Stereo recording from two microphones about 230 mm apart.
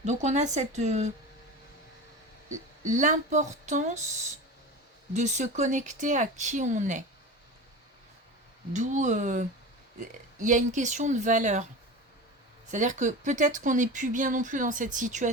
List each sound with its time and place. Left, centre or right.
0.0 s speech: right
2.5 s speech: right
8.7 s speech: right
12.7 s speech: right